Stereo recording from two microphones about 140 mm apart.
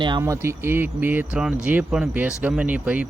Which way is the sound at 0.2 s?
20° right (ahead or behind).